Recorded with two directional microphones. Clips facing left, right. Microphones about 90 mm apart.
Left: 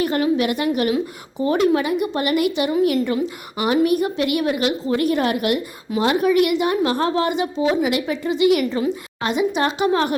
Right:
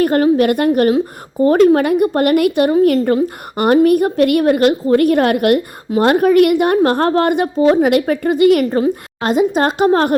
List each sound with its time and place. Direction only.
0.0 s a woman's voice: 50° right (ahead or behind)